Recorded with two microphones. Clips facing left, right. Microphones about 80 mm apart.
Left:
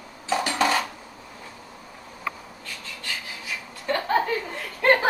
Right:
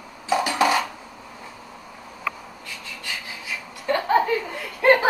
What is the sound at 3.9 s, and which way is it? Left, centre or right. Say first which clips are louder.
Chuckle: right 3 dB; centre.